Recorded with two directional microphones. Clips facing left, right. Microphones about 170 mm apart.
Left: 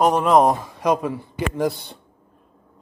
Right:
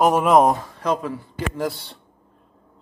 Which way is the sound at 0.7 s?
15° left (ahead or behind).